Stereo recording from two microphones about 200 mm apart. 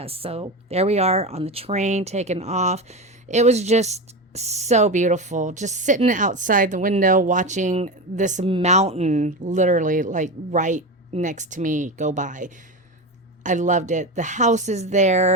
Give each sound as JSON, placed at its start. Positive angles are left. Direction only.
{"t": 0.0, "sound": "speech", "side_deg": -30}